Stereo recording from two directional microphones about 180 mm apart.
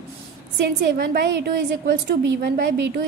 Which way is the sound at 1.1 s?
60° right (ahead or behind).